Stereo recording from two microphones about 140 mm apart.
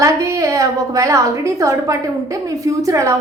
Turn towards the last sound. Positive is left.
turn(degrees=-20)  # may be behind; listen again after turning